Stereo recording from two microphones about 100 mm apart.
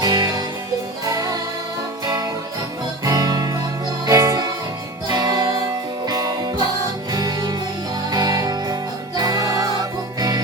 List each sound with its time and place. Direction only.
0.0 s music: 40° right (ahead or behind)
3.0 s music: 40° right (ahead or behind)